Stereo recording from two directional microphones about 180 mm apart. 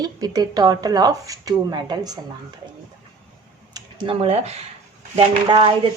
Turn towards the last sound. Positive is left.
turn(degrees=-25)  # may be behind; listen again after turning